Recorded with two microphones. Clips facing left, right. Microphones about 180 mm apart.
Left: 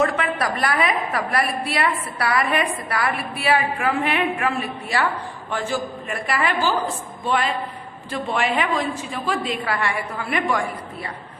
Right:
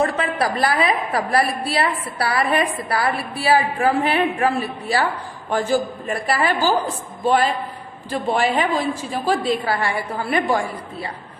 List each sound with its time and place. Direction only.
0.0 s a woman's voice: 30° right (ahead or behind)